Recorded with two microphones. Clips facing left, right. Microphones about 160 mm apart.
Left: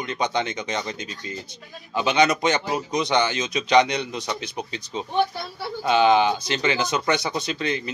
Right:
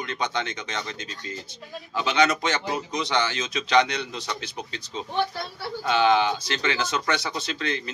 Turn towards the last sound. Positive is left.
turn(degrees=15)  # may be behind; listen again after turning